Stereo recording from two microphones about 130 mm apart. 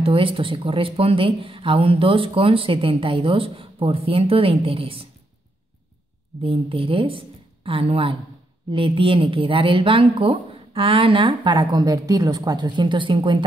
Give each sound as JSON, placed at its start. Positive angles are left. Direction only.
{"t": 0.0, "sound": "speech", "side_deg": -45}
{"t": 6.4, "sound": "speech", "side_deg": -45}